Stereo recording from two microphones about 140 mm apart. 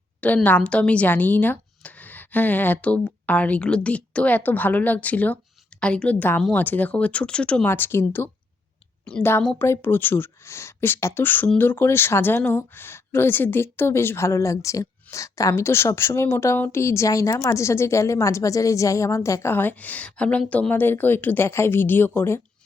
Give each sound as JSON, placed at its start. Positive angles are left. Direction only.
{"t": 0.2, "sound": "speech", "side_deg": 10}